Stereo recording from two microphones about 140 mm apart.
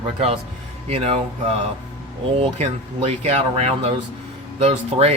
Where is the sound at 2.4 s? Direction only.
50° right (ahead or behind).